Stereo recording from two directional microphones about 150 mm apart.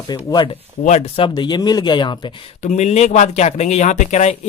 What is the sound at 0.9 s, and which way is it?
Speech, 40° left (ahead or behind).